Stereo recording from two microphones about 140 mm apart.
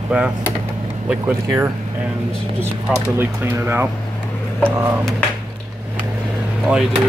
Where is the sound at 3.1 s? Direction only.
15° right (ahead or behind).